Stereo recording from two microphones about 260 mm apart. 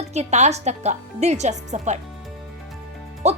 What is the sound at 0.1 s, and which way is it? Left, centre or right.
A woman's voice, right.